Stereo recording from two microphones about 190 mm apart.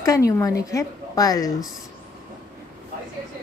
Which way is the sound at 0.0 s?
15° left (ahead or behind).